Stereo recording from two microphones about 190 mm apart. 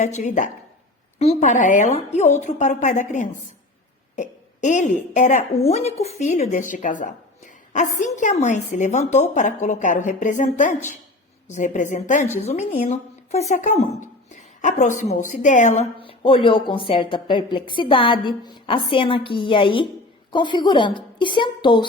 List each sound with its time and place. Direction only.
0.0 s a woman's voice: 40° left (ahead or behind)
16.0 s a woman's voice: 30° left (ahead or behind)